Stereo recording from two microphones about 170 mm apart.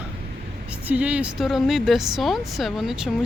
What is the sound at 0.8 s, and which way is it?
Speech, 10° right (ahead or behind).